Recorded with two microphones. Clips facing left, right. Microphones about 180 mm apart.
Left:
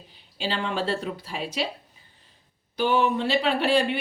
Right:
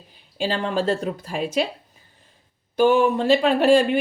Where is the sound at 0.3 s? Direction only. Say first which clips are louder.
Right 5 dB; 45° right (ahead or behind).